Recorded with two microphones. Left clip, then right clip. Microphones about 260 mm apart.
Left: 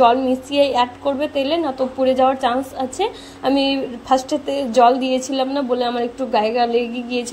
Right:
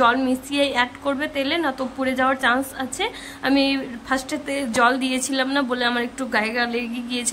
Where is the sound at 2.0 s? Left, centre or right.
Centre.